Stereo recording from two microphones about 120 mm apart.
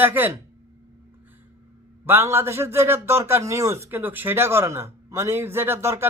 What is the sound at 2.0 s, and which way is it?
A man's voice, 20° right (ahead or behind).